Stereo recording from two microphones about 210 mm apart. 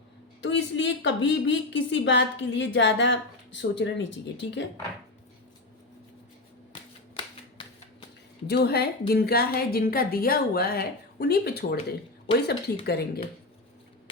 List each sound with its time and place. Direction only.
0.4 s a woman's voice: 55° left (ahead or behind)
7.6 s a sound: 25° left (ahead or behind)
8.4 s a woman's voice: 50° left (ahead or behind)